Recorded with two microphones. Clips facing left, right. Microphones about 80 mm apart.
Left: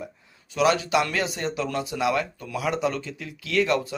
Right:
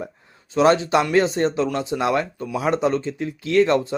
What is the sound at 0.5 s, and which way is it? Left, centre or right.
Speech, right.